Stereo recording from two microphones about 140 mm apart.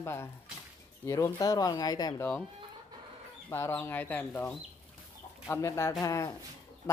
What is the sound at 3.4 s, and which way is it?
Speech, 15° left (ahead or behind).